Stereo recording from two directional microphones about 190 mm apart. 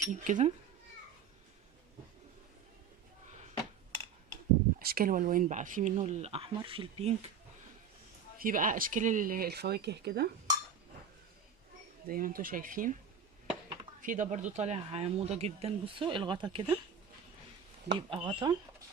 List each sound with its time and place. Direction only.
0.1 s speech: 40° right (ahead or behind)
4.8 s speech: 55° right (ahead or behind); by 7.3 s 35° right (ahead or behind)
8.4 s speech: 45° right (ahead or behind)
12.0 s speech: 50° right (ahead or behind)
14.0 s speech: 40° right (ahead or behind); by 16.7 s 25° right (ahead or behind)
17.9 s speech: 30° right (ahead or behind)